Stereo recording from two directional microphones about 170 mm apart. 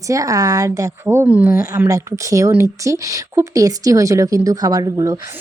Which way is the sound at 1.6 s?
20° right (ahead or behind).